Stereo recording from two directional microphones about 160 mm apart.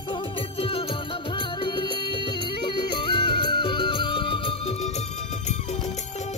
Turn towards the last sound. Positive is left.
turn(degrees=45)  # may be behind; listen again after turning